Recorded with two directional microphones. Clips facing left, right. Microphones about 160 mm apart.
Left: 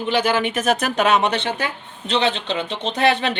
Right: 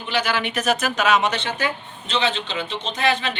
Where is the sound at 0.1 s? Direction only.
50° left (ahead or behind).